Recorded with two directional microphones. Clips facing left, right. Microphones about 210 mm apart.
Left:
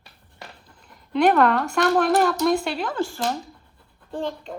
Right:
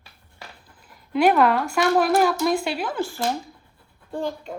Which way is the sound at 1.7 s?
5° right (ahead or behind).